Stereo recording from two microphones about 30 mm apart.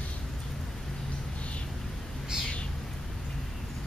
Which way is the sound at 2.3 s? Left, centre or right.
Right.